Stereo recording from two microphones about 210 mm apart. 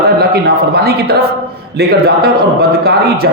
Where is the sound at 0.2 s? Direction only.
50° right (ahead or behind).